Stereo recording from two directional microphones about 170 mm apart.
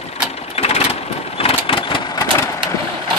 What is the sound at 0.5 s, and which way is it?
Vehicle, 40° left (ahead or behind).